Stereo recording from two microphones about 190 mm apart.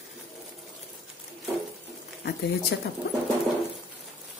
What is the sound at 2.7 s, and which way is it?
Speech, 55° left (ahead or behind).